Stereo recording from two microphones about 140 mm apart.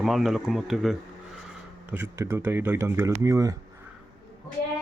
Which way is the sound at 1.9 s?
15° right (ahead or behind).